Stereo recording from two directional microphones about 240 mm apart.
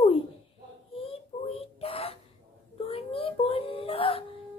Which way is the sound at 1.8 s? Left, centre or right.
Left.